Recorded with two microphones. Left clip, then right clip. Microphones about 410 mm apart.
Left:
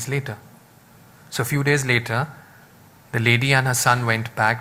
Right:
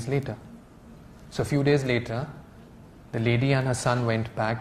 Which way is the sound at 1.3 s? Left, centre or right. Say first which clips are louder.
Left 3 dB; right.